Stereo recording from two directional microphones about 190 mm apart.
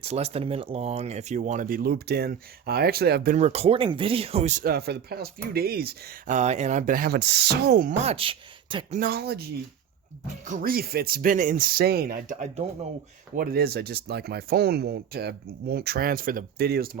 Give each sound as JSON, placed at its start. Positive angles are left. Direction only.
{"t": 0.0, "sound": "speech", "side_deg": -35}
{"t": 3.3, "sound": "speech", "side_deg": -35}
{"t": 4.6, "sound": "speech", "side_deg": -55}
{"t": 8.0, "sound": "speech", "side_deg": -30}
{"t": 9.0, "sound": "speech", "side_deg": -55}
{"t": 10.4, "sound": "speech", "side_deg": -45}
{"t": 13.3, "sound": "speech", "side_deg": -50}